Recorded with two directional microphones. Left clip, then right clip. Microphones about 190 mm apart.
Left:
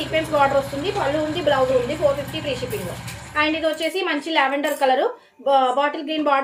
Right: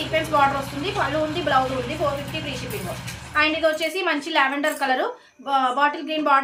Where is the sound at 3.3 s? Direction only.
40° right (ahead or behind).